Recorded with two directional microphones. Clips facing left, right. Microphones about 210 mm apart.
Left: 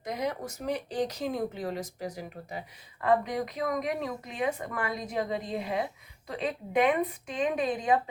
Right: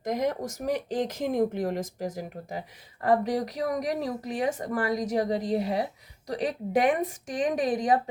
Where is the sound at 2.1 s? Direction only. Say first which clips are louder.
Right 4 dB; 40° right (ahead or behind).